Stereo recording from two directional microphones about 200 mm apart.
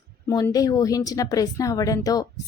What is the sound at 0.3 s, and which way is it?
A woman's voice, 15° left (ahead or behind).